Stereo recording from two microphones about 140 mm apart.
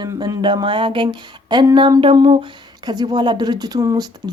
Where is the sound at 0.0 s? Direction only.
30° right (ahead or behind).